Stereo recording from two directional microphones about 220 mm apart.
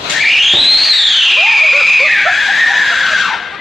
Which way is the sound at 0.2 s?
Centre (ahead or behind).